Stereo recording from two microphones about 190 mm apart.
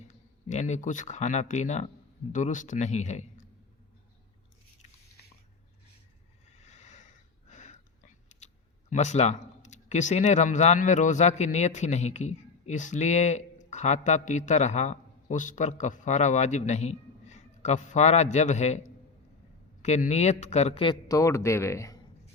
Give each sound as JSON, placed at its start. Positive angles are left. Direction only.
{"t": 0.4, "sound": "speech", "side_deg": 40}
{"t": 6.6, "sound": "a sound", "side_deg": 35}
{"t": 8.9, "sound": "speech", "side_deg": 35}
{"t": 21.1, "sound": "speech", "side_deg": 15}